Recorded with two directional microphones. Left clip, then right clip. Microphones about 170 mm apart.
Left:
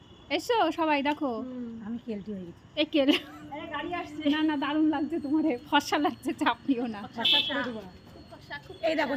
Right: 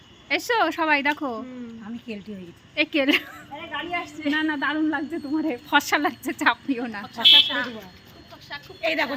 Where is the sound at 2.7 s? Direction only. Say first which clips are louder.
Right 4 dB; 10° right (ahead or behind).